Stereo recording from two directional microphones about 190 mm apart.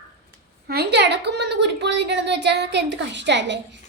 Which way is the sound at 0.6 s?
55° right (ahead or behind).